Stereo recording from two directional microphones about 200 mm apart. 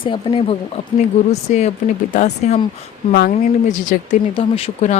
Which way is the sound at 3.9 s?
45° left (ahead or behind).